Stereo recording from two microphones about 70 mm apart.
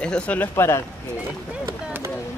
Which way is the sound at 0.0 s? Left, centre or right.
Centre.